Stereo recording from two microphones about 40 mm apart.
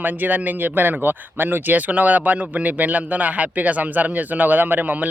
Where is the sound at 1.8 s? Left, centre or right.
Right.